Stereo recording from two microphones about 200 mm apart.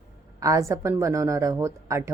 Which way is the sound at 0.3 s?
15° right (ahead or behind).